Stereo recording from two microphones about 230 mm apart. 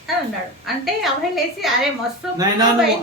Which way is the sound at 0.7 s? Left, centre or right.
Centre.